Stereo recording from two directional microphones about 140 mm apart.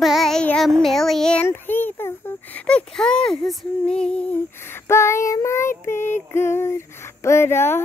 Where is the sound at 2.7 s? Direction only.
5° left (ahead or behind).